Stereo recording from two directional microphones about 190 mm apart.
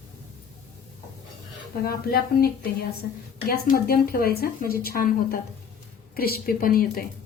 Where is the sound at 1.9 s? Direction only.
55° left (ahead or behind).